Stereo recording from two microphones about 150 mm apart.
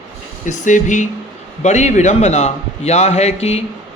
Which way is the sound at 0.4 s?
55° left (ahead or behind).